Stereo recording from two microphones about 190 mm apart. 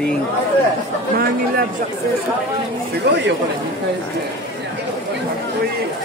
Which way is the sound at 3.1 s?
60° right (ahead or behind).